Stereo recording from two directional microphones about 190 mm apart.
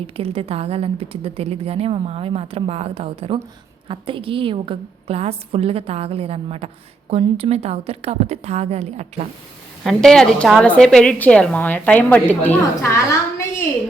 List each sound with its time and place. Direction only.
0.2 s a woman's voice: 30° right (ahead or behind)
9.8 s a woman's voice: centre (ahead or behind)